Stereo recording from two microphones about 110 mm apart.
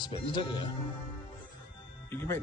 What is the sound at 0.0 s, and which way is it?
Speech, 45° left (ahead or behind).